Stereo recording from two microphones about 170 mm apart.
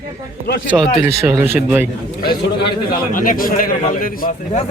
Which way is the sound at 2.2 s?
65° left (ahead or behind).